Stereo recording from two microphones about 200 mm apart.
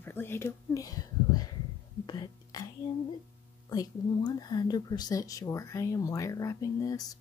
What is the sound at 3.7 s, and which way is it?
Speech, 20° left (ahead or behind).